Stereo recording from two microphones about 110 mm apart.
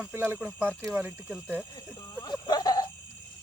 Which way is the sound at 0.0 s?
20° right (ahead or behind).